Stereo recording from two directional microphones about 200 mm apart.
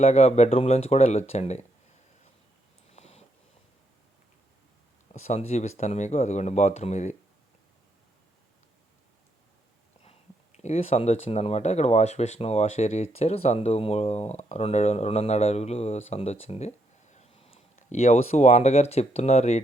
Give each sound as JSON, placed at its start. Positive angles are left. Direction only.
{"t": 0.0, "sound": "speech", "side_deg": 35}
{"t": 2.9, "sound": "a sound", "side_deg": 30}
{"t": 5.1, "sound": "speech", "side_deg": 35}
{"t": 10.0, "sound": "speech", "side_deg": 30}